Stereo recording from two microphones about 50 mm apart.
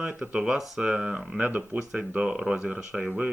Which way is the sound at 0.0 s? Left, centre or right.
Centre.